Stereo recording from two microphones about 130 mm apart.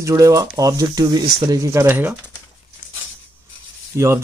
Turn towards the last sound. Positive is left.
turn(degrees=-20)  # may be behind; listen again after turning